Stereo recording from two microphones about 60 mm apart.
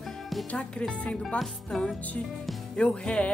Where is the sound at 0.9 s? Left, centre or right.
Centre.